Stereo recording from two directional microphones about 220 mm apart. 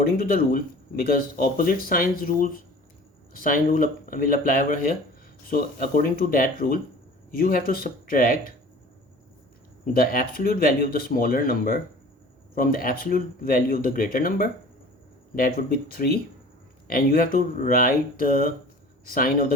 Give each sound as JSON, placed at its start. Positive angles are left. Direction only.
{"t": 0.0, "sound": "speech", "side_deg": 40}
{"t": 9.8, "sound": "speech", "side_deg": 40}